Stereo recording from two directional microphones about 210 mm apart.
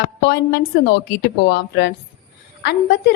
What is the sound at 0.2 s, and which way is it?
A woman's voice, 50° left (ahead or behind).